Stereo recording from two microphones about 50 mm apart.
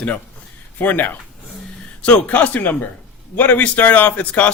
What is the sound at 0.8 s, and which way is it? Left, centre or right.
Speech, left.